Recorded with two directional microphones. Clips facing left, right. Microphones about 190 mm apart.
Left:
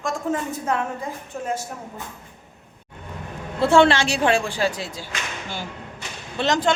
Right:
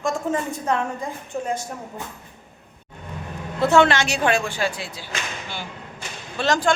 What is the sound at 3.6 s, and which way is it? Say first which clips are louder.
Speech: left 1 dB; 30° left (ahead or behind).